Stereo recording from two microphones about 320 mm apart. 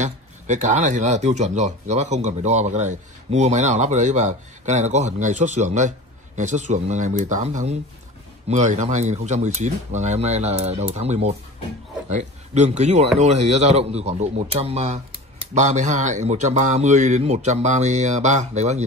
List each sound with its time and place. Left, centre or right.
0.0 s speech: right